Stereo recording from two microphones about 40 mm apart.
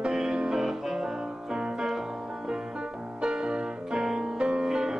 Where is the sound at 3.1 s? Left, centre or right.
Centre.